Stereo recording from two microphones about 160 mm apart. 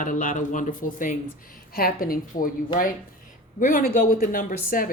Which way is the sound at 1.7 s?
65° left (ahead or behind).